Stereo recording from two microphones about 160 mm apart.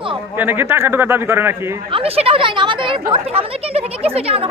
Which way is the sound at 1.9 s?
35° right (ahead or behind).